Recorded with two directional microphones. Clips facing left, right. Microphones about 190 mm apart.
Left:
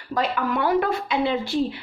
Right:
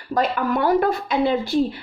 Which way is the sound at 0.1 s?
45° right (ahead or behind).